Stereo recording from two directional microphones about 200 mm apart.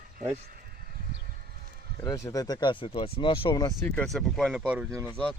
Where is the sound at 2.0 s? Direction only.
15° left (ahead or behind).